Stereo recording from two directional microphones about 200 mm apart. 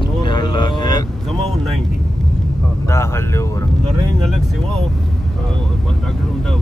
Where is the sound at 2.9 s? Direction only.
15° left (ahead or behind).